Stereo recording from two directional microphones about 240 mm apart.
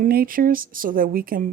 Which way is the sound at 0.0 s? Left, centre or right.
Right.